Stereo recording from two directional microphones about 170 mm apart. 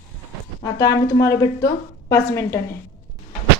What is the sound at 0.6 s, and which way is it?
Speech, 20° left (ahead or behind).